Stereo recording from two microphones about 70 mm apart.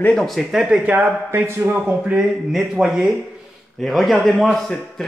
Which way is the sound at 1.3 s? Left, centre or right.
Right.